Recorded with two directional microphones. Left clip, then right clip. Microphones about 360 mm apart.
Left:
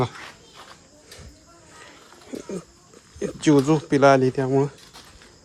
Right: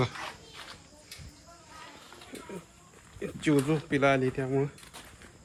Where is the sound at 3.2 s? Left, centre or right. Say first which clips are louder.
Left 9 dB; left.